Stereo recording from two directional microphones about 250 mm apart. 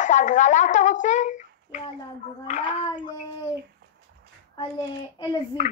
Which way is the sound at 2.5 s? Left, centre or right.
Left.